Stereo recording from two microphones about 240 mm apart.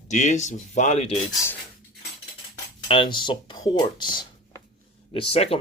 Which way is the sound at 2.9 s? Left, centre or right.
Centre.